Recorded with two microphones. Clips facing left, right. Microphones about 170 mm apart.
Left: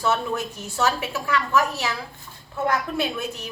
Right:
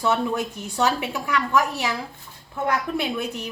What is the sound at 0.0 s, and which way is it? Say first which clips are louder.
A woman's voice: right 1 dB; 15° right (ahead or behind).